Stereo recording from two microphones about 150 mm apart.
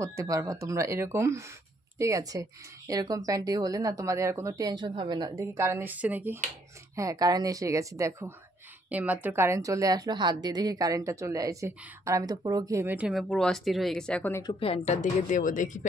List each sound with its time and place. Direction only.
0.0 s a woman's voice: 20° right (ahead or behind)
5.4 s speech: 20° right (ahead or behind)
7.0 s a woman's voice: 25° right (ahead or behind)
13.1 s a woman's voice: 5° left (ahead or behind)
14.6 s speech: 40° left (ahead or behind)
15.0 s speech: 55° left (ahead or behind)